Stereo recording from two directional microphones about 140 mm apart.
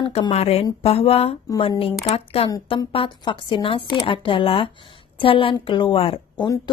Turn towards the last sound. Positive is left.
turn(degrees=35)  # may be behind; listen again after turning